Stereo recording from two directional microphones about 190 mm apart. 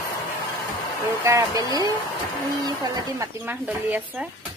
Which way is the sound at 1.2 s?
15° right (ahead or behind).